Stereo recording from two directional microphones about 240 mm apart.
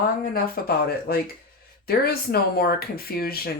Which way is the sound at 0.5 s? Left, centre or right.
Left.